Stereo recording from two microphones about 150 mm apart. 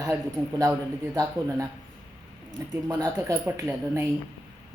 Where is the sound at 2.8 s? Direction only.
25° right (ahead or behind).